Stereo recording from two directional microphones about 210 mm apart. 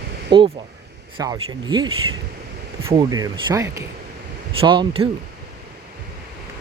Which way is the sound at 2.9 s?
15° right (ahead or behind).